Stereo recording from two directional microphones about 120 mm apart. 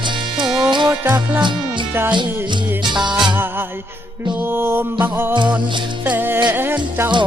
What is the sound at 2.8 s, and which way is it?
Music, 40° right (ahead or behind).